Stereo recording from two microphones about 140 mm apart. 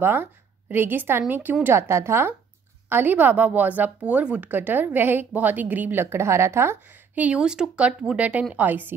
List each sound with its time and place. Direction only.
0.0 s a woman's voice: 15° right (ahead or behind)